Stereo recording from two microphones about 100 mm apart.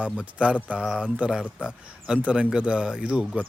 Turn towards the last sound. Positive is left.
turn(degrees=-10)  # may be behind; listen again after turning